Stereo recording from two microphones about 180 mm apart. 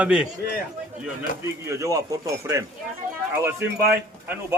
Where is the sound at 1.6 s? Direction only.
15° right (ahead or behind).